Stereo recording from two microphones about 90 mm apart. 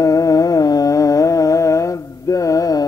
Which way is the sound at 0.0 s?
40° left (ahead or behind).